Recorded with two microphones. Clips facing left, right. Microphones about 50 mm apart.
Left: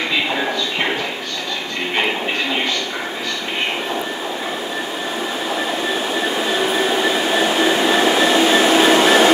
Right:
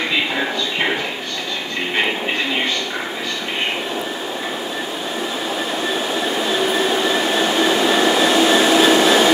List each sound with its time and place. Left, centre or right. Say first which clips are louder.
6.2 s train: even; centre; by 9.3 s left